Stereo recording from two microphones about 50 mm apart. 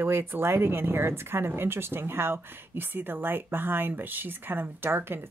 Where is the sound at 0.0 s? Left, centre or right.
Right.